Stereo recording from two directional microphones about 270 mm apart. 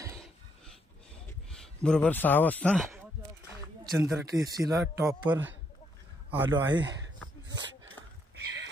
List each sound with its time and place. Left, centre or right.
1.5 s a man's voice: centre
4.0 s speech: centre
8.4 s a sound: right